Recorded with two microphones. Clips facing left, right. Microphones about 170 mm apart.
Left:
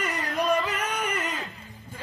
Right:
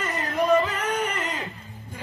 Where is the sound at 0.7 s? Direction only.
10° left (ahead or behind).